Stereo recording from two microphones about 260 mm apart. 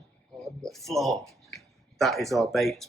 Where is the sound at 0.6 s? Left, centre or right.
Centre.